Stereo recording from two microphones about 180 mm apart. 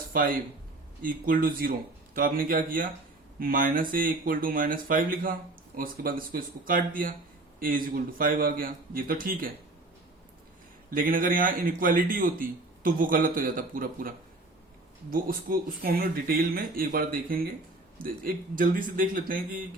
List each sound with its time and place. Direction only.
0.1 s speech: 50° right (ahead or behind)
10.9 s speech: 50° right (ahead or behind)
15.1 s speech: 50° right (ahead or behind)